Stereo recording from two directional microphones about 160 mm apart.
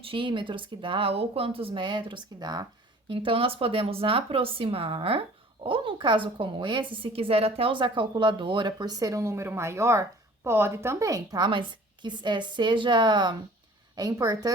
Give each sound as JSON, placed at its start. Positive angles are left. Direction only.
{"t": 0.0, "sound": "a woman's voice", "side_deg": -30}